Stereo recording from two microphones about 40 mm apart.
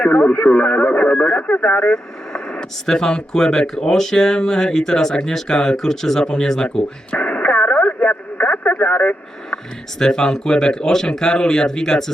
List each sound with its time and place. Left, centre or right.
0.3 s speech: left
2.3 s vehicle: left
2.8 s speech: centre
7.1 s radio: left
10.0 s speech: centre